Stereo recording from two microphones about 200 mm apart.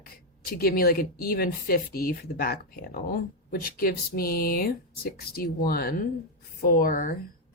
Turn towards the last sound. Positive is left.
turn(degrees=40)  # may be behind; listen again after turning